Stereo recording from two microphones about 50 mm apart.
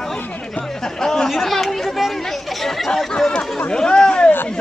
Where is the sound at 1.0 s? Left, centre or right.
Centre.